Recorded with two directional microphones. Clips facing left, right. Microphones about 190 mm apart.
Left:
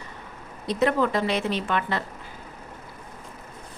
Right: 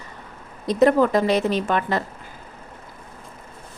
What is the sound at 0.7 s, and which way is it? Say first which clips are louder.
A woman's voice: right 6 dB; 45° right (ahead or behind).